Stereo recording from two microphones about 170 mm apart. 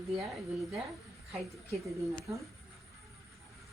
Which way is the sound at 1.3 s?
Centre (ahead or behind).